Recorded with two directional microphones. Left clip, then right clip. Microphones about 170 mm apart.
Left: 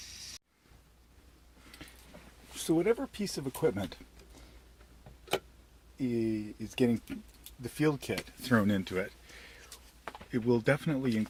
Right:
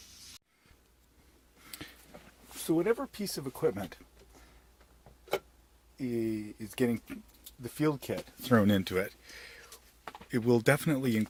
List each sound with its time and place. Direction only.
2.6 s speech: 10° right (ahead or behind); by 3.8 s 5° left (ahead or behind)
6.0 s speech: centre (ahead or behind)
7.6 s speech: 15° right (ahead or behind)
8.5 s speech: 55° right (ahead or behind)
10.3 s speech: 55° right (ahead or behind)